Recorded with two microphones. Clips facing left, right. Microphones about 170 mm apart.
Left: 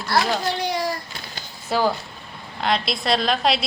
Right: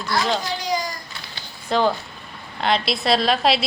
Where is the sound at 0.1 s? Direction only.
65° left (ahead or behind).